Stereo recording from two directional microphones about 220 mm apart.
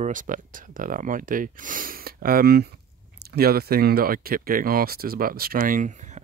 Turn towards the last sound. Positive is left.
turn(degrees=-35)  # may be behind; listen again after turning